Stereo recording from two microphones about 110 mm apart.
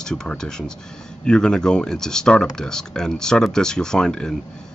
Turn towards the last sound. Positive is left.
turn(degrees=5)  # may be behind; listen again after turning